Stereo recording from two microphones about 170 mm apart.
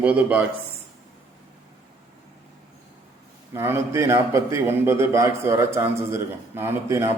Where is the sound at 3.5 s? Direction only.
15° right (ahead or behind).